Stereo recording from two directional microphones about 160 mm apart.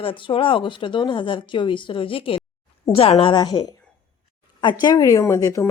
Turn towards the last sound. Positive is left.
turn(degrees=20)  # may be behind; listen again after turning